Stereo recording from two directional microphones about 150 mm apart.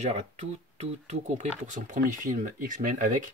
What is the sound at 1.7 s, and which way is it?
Speech, 60° right (ahead or behind).